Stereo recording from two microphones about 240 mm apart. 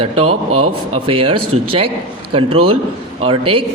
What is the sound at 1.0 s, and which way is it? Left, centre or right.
Speech, right.